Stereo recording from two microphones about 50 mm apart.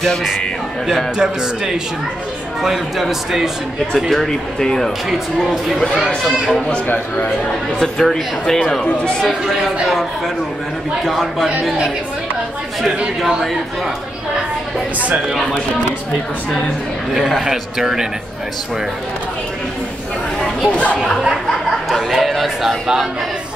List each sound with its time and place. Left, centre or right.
1.1 s speech: centre
3.9 s speech: centre
5.1 s speech: centre
7.8 s speech: centre
9.8 s speech: centre
17.1 s speech: centre
20.3 s chatter: left
21.8 s chatter: centre